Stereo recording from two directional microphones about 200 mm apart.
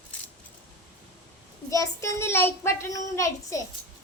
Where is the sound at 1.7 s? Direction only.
15° left (ahead or behind).